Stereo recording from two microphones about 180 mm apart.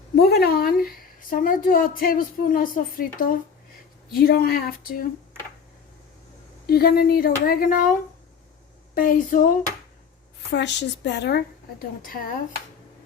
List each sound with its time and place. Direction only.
0.2 s a woman's voice: 60° left (ahead or behind)
6.7 s speech: 60° left (ahead or behind)
9.0 s a woman's voice: 50° left (ahead or behind)
10.5 s a woman's voice: 75° left (ahead or behind); by 12.3 s 55° left (ahead or behind)